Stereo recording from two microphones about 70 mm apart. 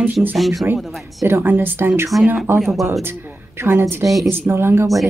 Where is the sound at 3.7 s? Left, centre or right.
Right.